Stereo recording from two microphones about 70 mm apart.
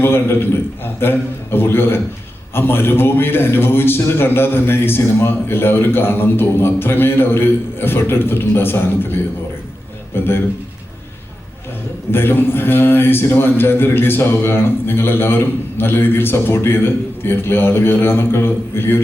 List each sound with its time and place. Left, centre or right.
0.0 s a man's voice: left
10.2 s a man's voice: left
12.1 s a man's voice: left